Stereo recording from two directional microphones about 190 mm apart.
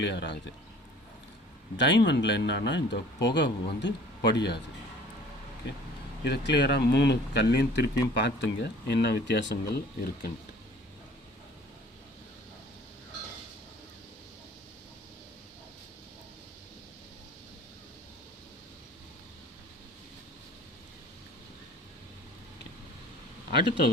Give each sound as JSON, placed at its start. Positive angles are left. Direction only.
{"t": 0.0, "sound": "speech", "side_deg": 65}
{"t": 1.7, "sound": "speech", "side_deg": 70}
{"t": 6.2, "sound": "speech", "side_deg": 65}